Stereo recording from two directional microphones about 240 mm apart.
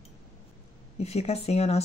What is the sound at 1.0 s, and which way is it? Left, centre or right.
Speech, left.